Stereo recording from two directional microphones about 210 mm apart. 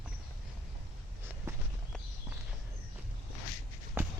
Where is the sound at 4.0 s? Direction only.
10° right (ahead or behind).